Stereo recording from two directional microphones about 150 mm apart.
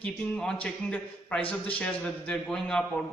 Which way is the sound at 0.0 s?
5° left (ahead or behind).